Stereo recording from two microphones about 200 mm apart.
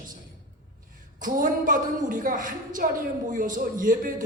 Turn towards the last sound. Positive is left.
turn(degrees=-40)  # may be behind; listen again after turning